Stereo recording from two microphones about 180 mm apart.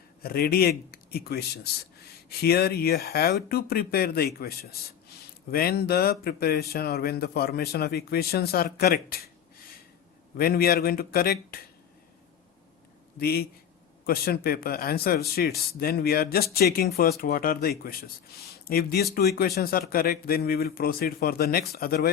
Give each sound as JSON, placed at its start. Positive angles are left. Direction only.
{"t": 0.2, "sound": "a man's voice", "side_deg": 60}
{"t": 10.3, "sound": "speech", "side_deg": 55}
{"t": 13.1, "sound": "a man's voice", "side_deg": 60}